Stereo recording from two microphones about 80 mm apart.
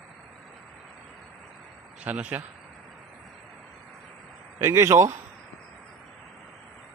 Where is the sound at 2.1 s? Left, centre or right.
Centre.